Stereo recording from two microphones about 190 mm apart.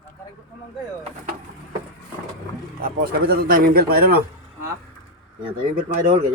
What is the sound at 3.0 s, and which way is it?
Speech, 50° right (ahead or behind).